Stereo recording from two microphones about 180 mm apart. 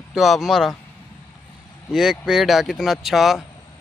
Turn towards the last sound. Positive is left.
turn(degrees=0)  # may be behind; listen again after turning